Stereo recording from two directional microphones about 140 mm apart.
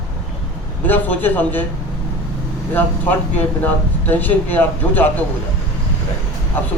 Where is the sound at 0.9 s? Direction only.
10° left (ahead or behind).